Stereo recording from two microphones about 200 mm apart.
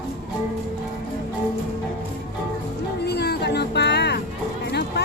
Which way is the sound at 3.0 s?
55° left (ahead or behind).